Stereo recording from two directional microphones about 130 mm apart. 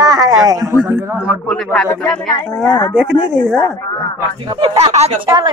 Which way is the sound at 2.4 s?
20° left (ahead or behind).